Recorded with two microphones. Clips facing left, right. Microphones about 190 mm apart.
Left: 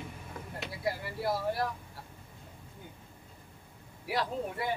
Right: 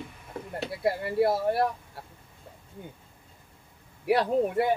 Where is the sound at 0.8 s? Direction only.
65° right (ahead or behind).